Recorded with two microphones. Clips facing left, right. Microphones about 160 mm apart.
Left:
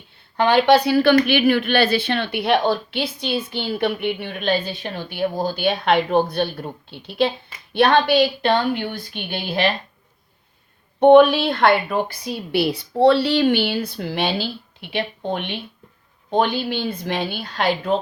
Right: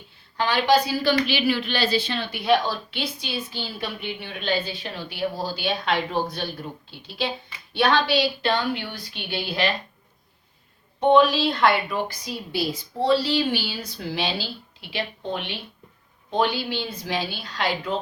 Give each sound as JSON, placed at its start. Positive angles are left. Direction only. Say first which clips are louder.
{"t": 0.3, "sound": "a woman's voice", "louder": "left 6 dB", "side_deg": 60}
{"t": 11.0, "sound": "a woman's voice", "louder": "left 6 dB", "side_deg": 60}